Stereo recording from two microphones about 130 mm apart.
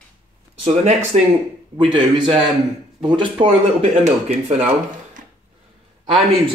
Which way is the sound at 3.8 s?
55° right (ahead or behind).